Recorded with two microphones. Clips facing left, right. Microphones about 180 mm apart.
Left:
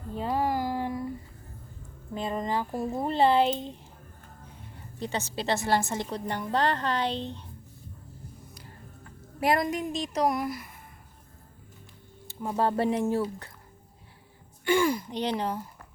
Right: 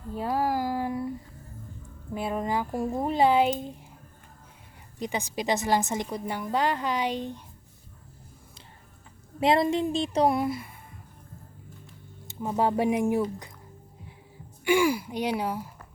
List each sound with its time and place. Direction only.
0.2 s a sound: 5° right (ahead or behind)
2.1 s a woman's voice: 10° right (ahead or behind)
4.9 s a woman's voice: 15° right (ahead or behind)
9.4 s a woman's voice: 25° right (ahead or behind)
12.3 s a woman's voice: 15° right (ahead or behind)
14.6 s a woman's voice: 10° right (ahead or behind)